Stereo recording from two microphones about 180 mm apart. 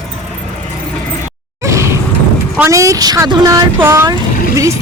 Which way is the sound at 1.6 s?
15° right (ahead or behind).